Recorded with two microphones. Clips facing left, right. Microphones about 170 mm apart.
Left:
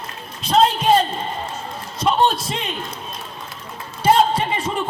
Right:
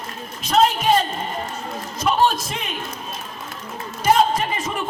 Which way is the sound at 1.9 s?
30° left (ahead or behind).